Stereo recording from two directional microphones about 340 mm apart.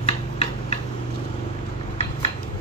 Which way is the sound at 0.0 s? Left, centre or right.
Centre.